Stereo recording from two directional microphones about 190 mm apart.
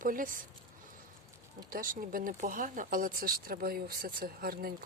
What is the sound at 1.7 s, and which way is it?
Speech, 45° right (ahead or behind).